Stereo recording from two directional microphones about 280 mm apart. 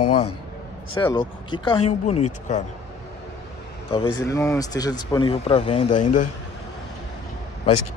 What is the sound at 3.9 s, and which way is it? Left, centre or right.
Speech, centre.